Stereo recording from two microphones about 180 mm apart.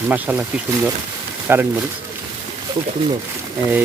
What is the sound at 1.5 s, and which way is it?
Speech, 10° right (ahead or behind).